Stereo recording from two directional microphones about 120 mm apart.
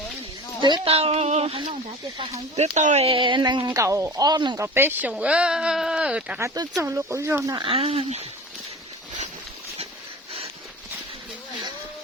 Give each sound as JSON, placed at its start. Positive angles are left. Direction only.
{"t": 0.6, "sound": "speech", "side_deg": -45}
{"t": 2.6, "sound": "speech", "side_deg": -75}
{"t": 3.8, "sound": "speech", "side_deg": -25}
{"t": 4.6, "sound": "speech", "side_deg": -20}
{"t": 6.4, "sound": "speech", "side_deg": -30}
{"t": 7.6, "sound": "speech", "side_deg": -55}